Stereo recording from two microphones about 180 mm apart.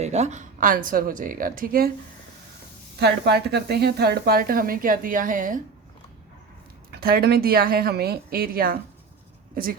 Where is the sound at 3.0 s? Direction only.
65° right (ahead or behind); by 5.6 s 50° right (ahead or behind).